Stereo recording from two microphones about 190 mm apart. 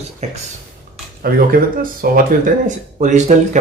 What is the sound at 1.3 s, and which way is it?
Speech, 55° right (ahead or behind).